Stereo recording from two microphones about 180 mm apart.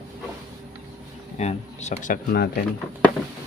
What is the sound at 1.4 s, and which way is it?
Speech, 40° left (ahead or behind).